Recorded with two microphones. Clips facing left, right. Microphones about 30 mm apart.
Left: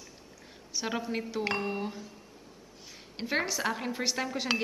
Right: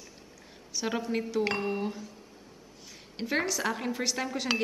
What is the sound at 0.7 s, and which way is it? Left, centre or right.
A woman's voice, centre.